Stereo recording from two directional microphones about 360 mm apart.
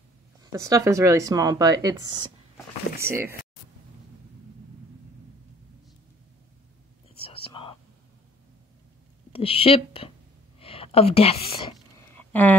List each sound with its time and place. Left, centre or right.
0.4 s speech: centre
7.2 s whispering: centre
9.3 s a woman's voice: centre
12.2 s a sound: centre